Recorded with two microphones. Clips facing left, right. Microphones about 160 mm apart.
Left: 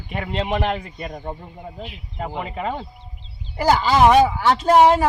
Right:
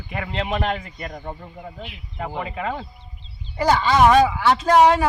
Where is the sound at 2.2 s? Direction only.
15° left (ahead or behind).